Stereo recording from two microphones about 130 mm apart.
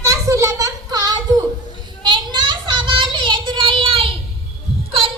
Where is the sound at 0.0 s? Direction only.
20° right (ahead or behind).